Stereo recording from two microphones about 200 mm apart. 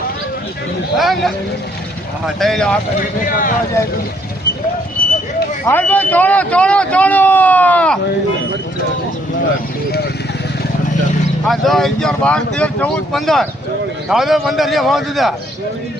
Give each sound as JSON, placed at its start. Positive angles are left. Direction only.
{"t": 0.9, "sound": "speech", "side_deg": 0}
{"t": 3.2, "sound": "speech", "side_deg": 40}
{"t": 5.6, "sound": "a man's voice", "side_deg": 10}
{"t": 11.4, "sound": "speech", "side_deg": 0}